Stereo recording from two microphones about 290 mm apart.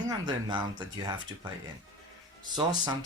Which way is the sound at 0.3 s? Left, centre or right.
Centre.